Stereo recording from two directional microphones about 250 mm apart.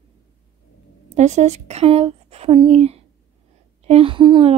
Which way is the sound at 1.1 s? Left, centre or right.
Right.